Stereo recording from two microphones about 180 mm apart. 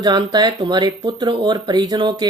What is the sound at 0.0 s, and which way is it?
Speech, 25° right (ahead or behind).